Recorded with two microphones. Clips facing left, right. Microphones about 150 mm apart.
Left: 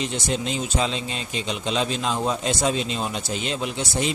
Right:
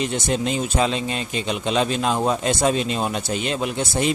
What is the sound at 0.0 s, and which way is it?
A man's voice, 55° right (ahead or behind).